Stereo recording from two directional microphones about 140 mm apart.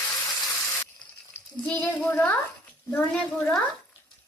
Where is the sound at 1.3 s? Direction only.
10° left (ahead or behind).